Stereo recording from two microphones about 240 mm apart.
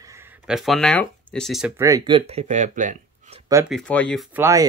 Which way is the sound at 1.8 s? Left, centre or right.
Centre.